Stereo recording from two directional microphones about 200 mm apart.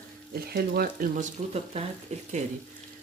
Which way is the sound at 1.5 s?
30° right (ahead or behind).